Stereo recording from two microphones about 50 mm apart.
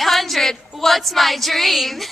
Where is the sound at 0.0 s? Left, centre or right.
Centre.